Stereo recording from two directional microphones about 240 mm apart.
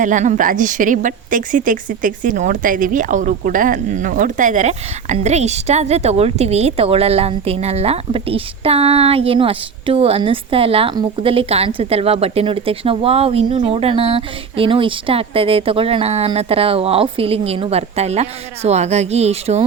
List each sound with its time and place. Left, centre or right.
0.0 s a woman's voice: right